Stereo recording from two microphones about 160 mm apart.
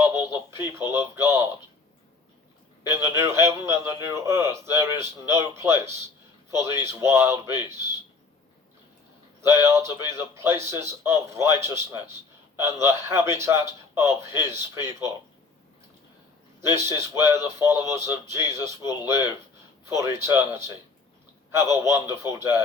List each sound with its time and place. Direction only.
0.0 s radio: 15° right (ahead or behind)
0.9 s a man's voice: 15° right (ahead or behind)
2.8 s a man's voice: 15° right (ahead or behind)
9.4 s a man's voice: 15° right (ahead or behind)
16.6 s a man's voice: 20° right (ahead or behind)
21.8 s a man's voice: 15° right (ahead or behind)